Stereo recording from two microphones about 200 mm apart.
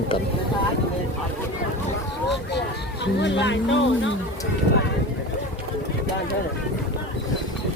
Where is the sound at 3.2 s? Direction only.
65° left (ahead or behind).